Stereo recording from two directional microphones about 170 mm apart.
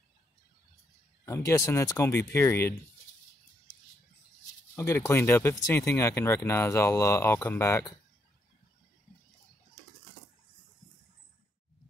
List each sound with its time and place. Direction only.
1.2 s speech: 20° left (ahead or behind)
3.7 s a sound: 50° left (ahead or behind)
4.7 s speech: 15° left (ahead or behind)